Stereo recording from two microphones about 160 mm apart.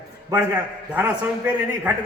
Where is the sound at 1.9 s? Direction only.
15° right (ahead or behind).